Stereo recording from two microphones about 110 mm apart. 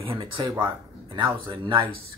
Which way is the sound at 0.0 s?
50° right (ahead or behind).